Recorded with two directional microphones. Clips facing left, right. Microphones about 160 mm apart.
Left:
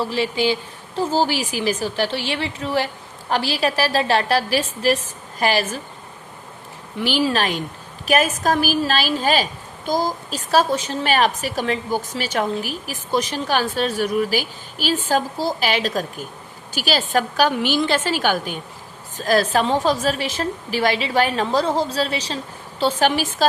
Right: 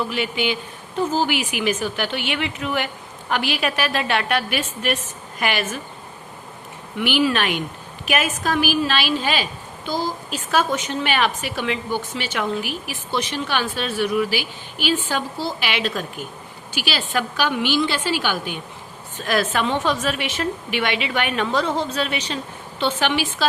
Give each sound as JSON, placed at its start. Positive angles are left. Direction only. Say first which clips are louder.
{"t": 0.0, "sound": "a woman's voice", "louder": "left 3 dB", "side_deg": 35}
{"t": 6.9, "sound": "a woman's voice", "louder": "even", "side_deg": 30}